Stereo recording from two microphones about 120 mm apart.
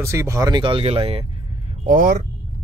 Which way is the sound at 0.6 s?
45° right (ahead or behind).